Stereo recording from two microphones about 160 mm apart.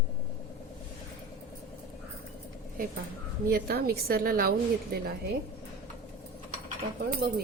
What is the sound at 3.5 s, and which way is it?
A woman's voice, 75° right (ahead or behind).